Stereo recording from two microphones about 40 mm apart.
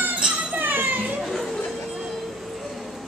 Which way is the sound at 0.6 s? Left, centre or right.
Right.